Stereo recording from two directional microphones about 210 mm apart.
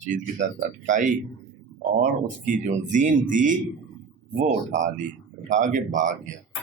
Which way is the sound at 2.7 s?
35° right (ahead or behind).